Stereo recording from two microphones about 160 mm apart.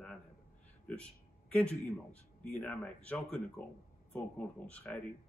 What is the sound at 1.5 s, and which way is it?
Speech, 5° left (ahead or behind).